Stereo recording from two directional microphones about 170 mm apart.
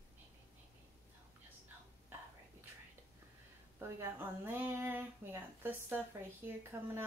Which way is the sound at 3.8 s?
15° right (ahead or behind).